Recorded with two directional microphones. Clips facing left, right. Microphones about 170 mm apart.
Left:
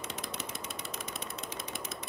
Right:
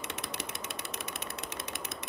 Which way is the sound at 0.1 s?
70° right (ahead or behind).